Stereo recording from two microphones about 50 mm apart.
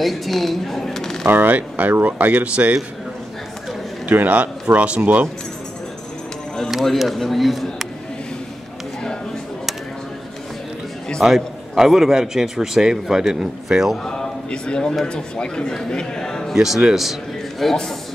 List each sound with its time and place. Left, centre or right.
0.0 s a woman's voice: centre
1.3 s speech: right
4.0 s speech: right
6.7 s a man's voice: centre
11.2 s a man's voice: centre
14.0 s a sound: centre
15.0 s speech: centre
16.5 s a man's voice: centre